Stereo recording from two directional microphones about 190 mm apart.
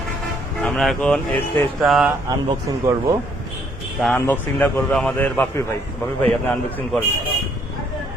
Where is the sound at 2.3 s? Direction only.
20° right (ahead or behind).